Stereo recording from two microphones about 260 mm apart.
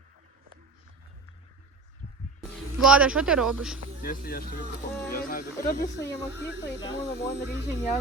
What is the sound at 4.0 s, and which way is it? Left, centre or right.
Speech, left.